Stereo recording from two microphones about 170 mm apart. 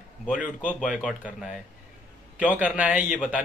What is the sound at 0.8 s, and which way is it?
Speech, 5° right (ahead or behind).